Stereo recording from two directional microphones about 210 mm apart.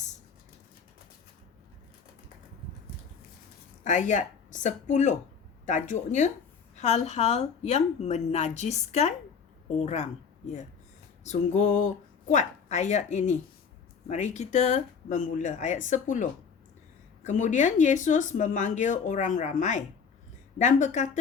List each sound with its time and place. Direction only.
3.8 s speech: 35° left (ahead or behind)
11.2 s speech: 35° left (ahead or behind)